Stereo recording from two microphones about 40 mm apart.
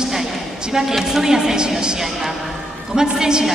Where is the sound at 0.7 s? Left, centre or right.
Centre.